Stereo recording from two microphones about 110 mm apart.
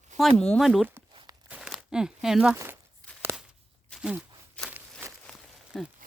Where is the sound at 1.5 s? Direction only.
10° right (ahead or behind).